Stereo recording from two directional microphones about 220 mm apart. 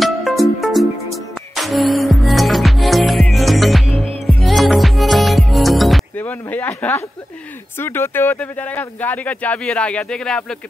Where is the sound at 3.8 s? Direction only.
25° right (ahead or behind).